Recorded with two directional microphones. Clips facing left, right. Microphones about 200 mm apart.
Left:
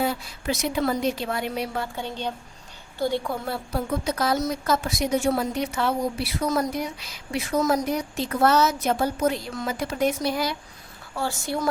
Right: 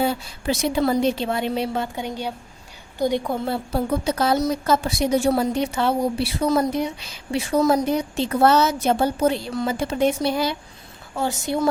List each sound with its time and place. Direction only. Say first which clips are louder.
0.0 s a woman's voice: right 3 dB; 30° right (ahead or behind)